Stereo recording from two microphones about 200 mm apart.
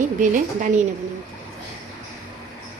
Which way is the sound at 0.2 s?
40° right (ahead or behind).